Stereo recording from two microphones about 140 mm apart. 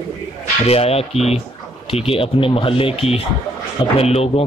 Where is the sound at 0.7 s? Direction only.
45° left (ahead or behind).